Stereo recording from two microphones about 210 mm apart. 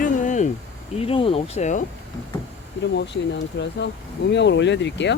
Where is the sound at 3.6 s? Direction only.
55° left (ahead or behind).